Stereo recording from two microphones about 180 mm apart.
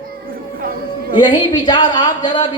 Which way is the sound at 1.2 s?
25° left (ahead or behind).